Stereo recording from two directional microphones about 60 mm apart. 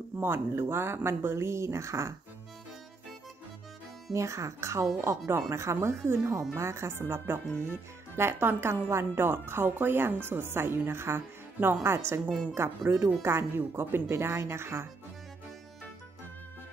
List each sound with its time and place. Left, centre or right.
0.2 s speech: right
4.1 s speech: right